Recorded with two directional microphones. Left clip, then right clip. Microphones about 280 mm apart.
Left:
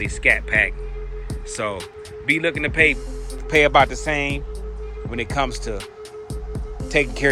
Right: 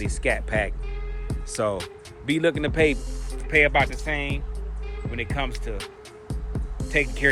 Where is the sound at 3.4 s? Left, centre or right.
Centre.